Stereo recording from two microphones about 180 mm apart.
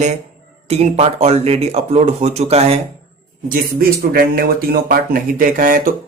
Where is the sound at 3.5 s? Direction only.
55° right (ahead or behind).